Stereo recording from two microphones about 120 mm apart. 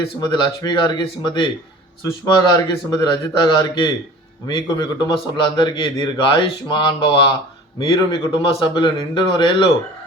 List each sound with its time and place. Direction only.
0.2 s a man's voice: 35° left (ahead or behind)